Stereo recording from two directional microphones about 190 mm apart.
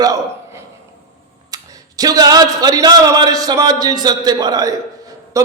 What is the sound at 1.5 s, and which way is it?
A man's voice, 20° right (ahead or behind).